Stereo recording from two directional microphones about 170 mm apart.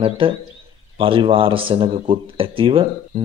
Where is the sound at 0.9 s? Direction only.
30° right (ahead or behind).